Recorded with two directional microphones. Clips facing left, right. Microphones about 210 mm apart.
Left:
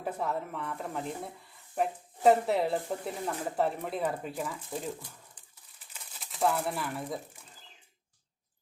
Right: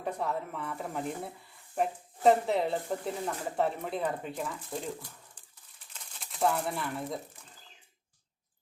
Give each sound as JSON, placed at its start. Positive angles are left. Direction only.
{"t": 0.0, "sound": "speech", "side_deg": 5}
{"t": 5.9, "sound": "speech", "side_deg": 5}